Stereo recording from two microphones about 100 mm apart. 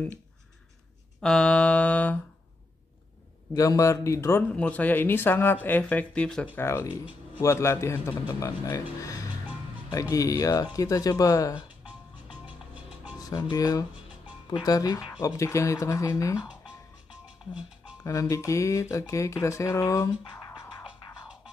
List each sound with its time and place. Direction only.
1.2 s speech: 10° left (ahead or behind)
3.5 s speech: 35° left (ahead or behind)
4.6 s speech: 15° left (ahead or behind)
6.5 s a man's voice: 25° left (ahead or behind)
8.6 s speech: 35° left (ahead or behind)
12.4 s music: 15° right (ahead or behind)
13.2 s speech: 50° left (ahead or behind); by 16.3 s 30° left (ahead or behind)
18.3 s speech: 30° left (ahead or behind)